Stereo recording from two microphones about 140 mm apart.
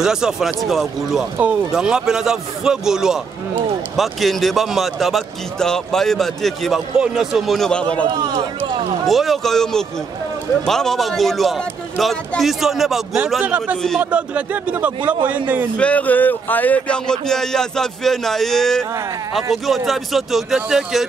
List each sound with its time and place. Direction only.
0.0 s speech: 5° right (ahead or behind)
8.1 s speech: 30° right (ahead or behind)
9.0 s speech: centre (ahead or behind)
15.8 s speech: 10° left (ahead or behind)